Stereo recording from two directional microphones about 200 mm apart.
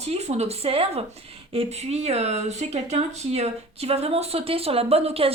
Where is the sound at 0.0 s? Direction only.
30° right (ahead or behind).